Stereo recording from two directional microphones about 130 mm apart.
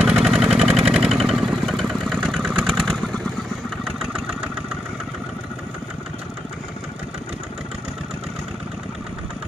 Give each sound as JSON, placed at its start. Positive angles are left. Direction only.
{"t": 0.0, "sound": "engine", "side_deg": -5}
{"t": 3.8, "sound": "vehicle", "side_deg": -5}